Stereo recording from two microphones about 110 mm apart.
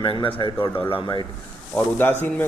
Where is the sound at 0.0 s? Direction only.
50° left (ahead or behind).